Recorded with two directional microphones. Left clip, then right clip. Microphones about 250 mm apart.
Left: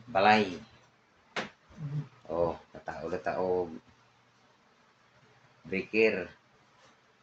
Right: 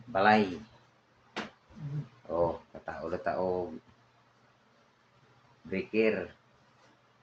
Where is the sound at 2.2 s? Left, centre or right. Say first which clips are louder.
Right 1 dB; centre.